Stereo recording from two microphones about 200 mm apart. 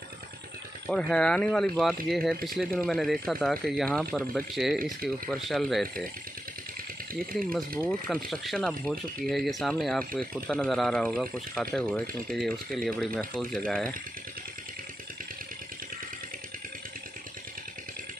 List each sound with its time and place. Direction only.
0.8 s speech: 5° left (ahead or behind)
8.1 s speech: centre (ahead or behind)